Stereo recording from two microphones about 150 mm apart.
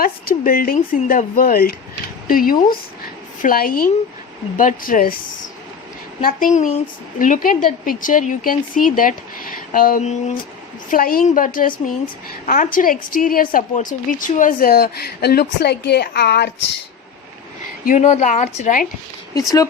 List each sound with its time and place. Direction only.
0.0 s a woman's voice: 75° left (ahead or behind)
6.2 s a woman's voice: 60° left (ahead or behind)
10.0 s a woman's voice: 50° left (ahead or behind)
10.8 s a woman's voice: 70° left (ahead or behind); by 16.5 s 90° left
17.8 s a woman's voice: 50° left (ahead or behind)
19.4 s speech: 25° left (ahead or behind)